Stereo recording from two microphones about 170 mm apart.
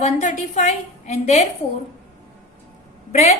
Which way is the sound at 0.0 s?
45° left (ahead or behind).